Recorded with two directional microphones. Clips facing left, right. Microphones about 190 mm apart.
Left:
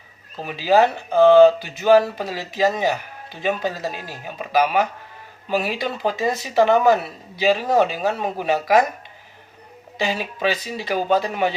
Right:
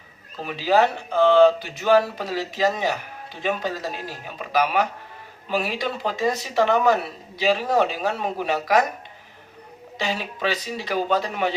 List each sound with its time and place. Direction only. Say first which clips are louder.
0.4 s a man's voice: left 3 dB; 5° left (ahead or behind)
10.0 s a man's voice: left 3 dB; 5° left (ahead or behind)